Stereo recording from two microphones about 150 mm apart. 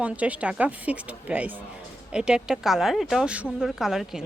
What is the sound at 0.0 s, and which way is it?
A woman's voice, 10° right (ahead or behind).